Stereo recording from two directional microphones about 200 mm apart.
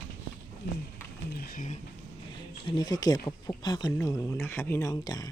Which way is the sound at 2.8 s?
20° left (ahead or behind).